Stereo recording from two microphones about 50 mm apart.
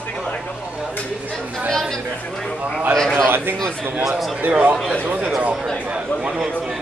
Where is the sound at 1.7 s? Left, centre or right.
Centre.